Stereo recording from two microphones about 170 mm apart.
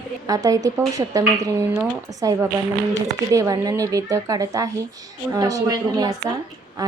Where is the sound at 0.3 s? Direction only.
20° right (ahead or behind).